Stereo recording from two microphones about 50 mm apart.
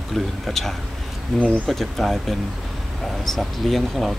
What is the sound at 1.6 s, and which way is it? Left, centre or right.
Speech, centre.